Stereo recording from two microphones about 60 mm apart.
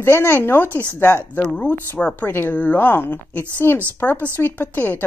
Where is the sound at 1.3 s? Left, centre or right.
Left.